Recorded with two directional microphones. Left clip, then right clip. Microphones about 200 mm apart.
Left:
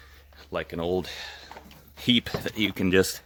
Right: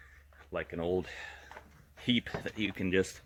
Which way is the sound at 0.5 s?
5° left (ahead or behind).